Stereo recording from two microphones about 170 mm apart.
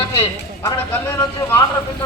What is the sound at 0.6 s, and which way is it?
Speech, 15° left (ahead or behind).